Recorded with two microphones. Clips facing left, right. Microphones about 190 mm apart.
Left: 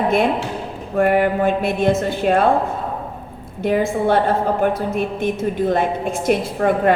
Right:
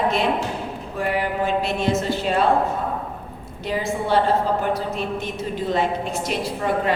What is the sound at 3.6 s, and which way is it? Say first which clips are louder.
A woman's voice: left 7 dB; 55° left (ahead or behind).